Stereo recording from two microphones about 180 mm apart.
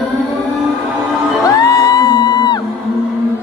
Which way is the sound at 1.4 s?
20° left (ahead or behind).